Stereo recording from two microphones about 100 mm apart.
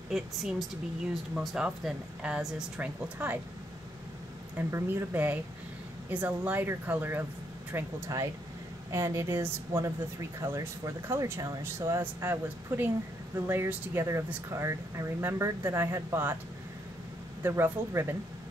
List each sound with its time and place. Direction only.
0.1 s a woman's voice: 5° right (ahead or behind)
4.6 s speech: 25° right (ahead or behind)
17.4 s speech: 20° right (ahead or behind)